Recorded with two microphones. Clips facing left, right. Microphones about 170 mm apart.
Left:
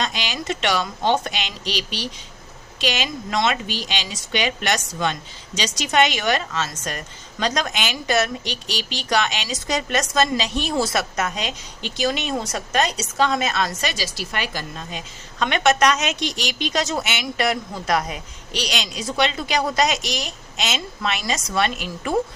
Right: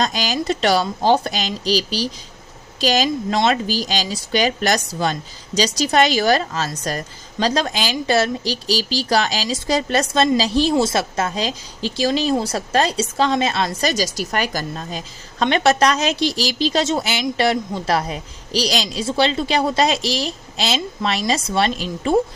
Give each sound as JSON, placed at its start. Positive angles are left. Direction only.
{"t": 0.0, "sound": "a woman's voice", "side_deg": -40}